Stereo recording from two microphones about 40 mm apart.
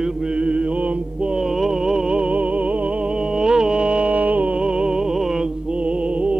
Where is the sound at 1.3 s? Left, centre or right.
Centre.